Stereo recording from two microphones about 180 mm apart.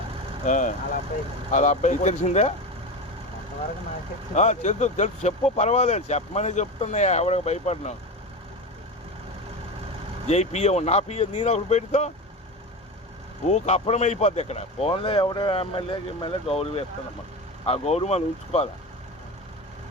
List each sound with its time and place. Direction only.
0.4 s speech: 45° left (ahead or behind)
4.4 s speech: 40° left (ahead or behind)
10.2 s speech: 40° left (ahead or behind)
13.5 s speech: 35° left (ahead or behind)